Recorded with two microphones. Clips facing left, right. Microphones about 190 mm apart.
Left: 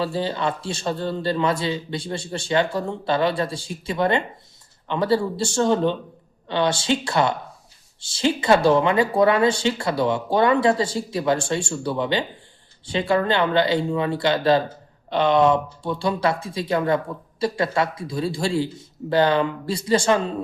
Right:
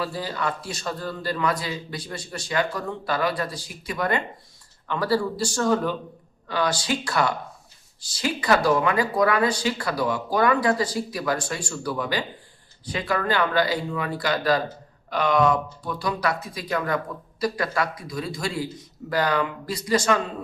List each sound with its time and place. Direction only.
0.0 s a man's voice: 25° left (ahead or behind)